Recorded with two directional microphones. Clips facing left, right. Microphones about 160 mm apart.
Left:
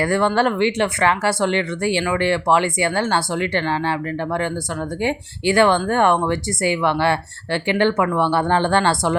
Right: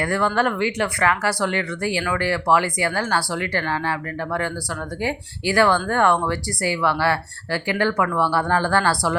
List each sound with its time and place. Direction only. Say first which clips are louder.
0.0 s speech: left 3 dB; 25° left (ahead or behind)